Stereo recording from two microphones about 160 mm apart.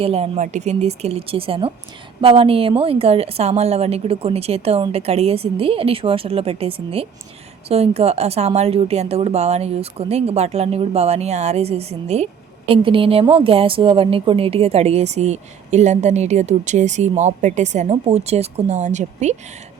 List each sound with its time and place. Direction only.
0.0 s a woman's voice: 40° right (ahead or behind)